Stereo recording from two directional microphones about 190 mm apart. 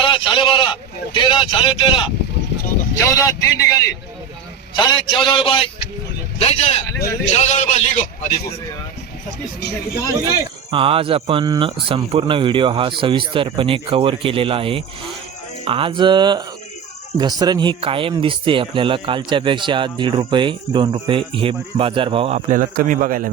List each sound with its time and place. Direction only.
0.0 s a man's voice: 25° left (ahead or behind)
10.2 s speech: 25° right (ahead or behind); by 23.3 s 45° right (ahead or behind)